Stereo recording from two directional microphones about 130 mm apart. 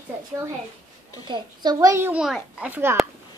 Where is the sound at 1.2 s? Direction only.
35° right (ahead or behind).